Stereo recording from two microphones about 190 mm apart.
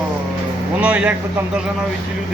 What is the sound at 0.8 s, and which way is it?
Speech, 5° right (ahead or behind).